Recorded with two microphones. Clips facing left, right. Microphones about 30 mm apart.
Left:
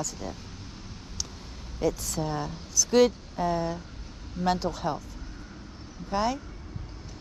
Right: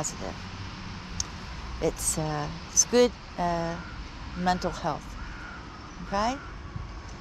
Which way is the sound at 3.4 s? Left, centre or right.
Right.